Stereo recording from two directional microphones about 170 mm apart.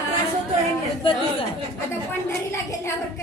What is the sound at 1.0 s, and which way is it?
Chatter, 30° left (ahead or behind).